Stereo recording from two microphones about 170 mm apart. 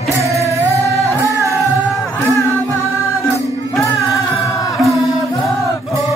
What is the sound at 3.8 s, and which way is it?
Music, 20° left (ahead or behind).